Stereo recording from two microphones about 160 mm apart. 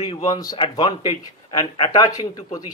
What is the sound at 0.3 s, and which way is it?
Speech, 25° left (ahead or behind).